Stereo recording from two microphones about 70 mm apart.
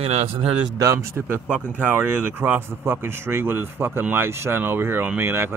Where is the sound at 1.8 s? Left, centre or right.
Right.